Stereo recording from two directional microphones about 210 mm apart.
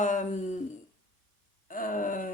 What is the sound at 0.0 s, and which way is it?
Speech, 35° left (ahead or behind).